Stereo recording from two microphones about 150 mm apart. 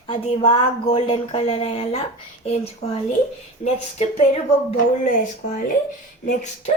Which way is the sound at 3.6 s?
45° left (ahead or behind).